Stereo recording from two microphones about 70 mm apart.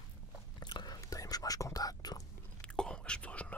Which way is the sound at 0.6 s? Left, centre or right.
Left.